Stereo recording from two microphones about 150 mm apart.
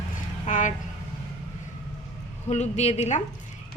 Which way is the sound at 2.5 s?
50° left (ahead or behind).